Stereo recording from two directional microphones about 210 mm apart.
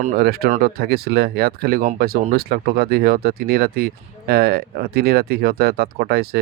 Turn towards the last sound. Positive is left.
turn(degrees=-50)  # may be behind; listen again after turning